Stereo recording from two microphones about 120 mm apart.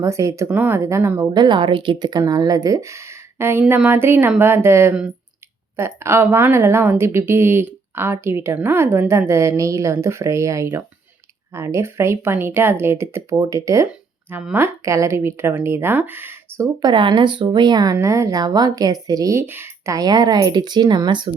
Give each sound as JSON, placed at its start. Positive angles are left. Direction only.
{"t": 0.0, "sound": "a woman's voice", "side_deg": -25}
{"t": 0.5, "sound": "speech", "side_deg": -15}
{"t": 0.8, "sound": "a woman's voice", "side_deg": -25}
{"t": 1.3, "sound": "a woman's voice", "side_deg": -40}
{"t": 13.8, "sound": "a sound", "side_deg": -15}
{"t": 14.5, "sound": "a woman's voice", "side_deg": -25}
{"t": 16.8, "sound": "speech", "side_deg": -40}
{"t": 17.9, "sound": "speech", "side_deg": -25}